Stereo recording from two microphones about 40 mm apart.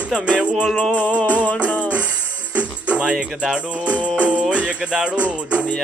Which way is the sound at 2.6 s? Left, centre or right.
Right.